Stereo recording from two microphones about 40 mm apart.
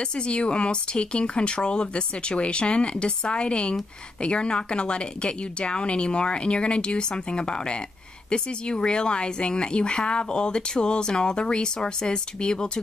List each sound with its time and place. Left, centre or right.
0.0 s speech: left